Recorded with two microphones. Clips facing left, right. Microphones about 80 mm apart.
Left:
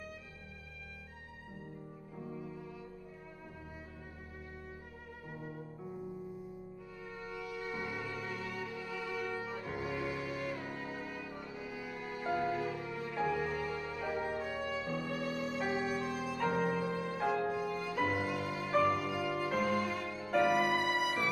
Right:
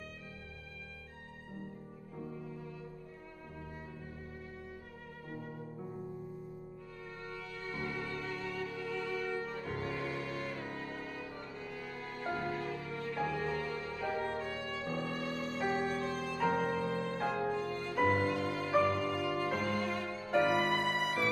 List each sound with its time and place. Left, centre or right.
2.1 s music: centre
5.3 s music: centre
7.2 s music: centre